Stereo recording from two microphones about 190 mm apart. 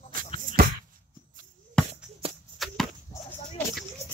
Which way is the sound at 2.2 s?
30° right (ahead or behind).